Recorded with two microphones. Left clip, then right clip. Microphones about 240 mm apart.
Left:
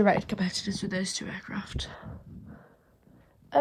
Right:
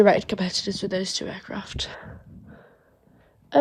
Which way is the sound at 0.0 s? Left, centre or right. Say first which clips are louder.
Right 7 dB; right.